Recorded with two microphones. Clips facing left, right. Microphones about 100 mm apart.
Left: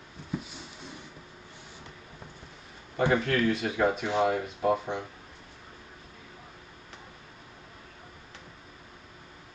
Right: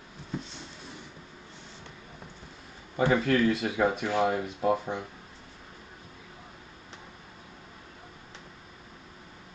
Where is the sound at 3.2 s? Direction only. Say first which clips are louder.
Right 2 dB; 20° right (ahead or behind).